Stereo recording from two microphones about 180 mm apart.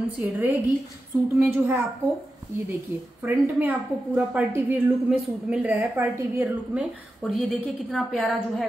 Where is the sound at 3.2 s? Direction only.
10° right (ahead or behind).